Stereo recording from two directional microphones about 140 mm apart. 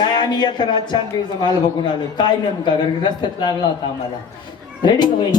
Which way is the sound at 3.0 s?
30° left (ahead or behind).